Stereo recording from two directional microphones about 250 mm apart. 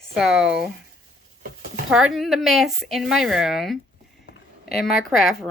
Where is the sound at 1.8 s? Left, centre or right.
Centre.